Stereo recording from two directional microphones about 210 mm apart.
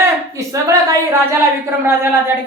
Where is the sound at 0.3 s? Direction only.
15° right (ahead or behind).